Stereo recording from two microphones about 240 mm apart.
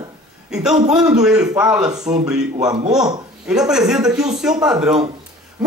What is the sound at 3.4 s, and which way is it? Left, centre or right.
A man's voice, centre.